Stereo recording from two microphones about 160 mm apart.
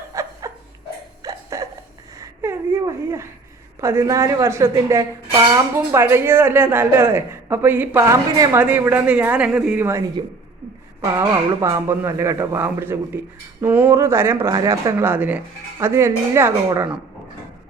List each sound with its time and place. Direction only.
0.1 s a sound: 20° right (ahead or behind)
3.8 s a woman's voice: 20° right (ahead or behind)
11.1 s a woman's voice: 20° right (ahead or behind)